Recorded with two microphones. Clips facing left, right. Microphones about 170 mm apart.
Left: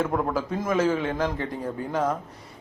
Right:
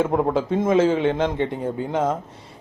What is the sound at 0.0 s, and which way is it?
A man's voice, 25° right (ahead or behind).